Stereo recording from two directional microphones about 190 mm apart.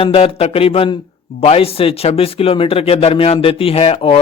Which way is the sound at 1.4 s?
30° left (ahead or behind).